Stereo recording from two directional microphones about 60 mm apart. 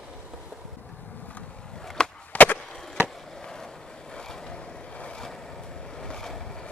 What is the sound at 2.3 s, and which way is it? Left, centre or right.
Skateboard, left.